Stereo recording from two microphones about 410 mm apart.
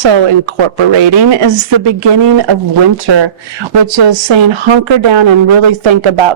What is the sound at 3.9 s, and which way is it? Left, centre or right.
Speech, right.